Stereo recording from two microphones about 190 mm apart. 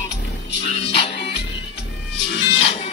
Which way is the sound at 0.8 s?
30° left (ahead or behind).